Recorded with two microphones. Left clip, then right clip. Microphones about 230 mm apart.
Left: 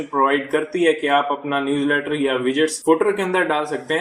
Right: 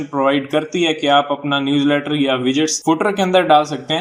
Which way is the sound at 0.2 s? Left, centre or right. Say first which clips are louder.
Right 2 dB; right.